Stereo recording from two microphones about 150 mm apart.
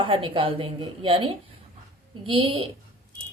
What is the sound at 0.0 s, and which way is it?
Speech, 35° right (ahead or behind).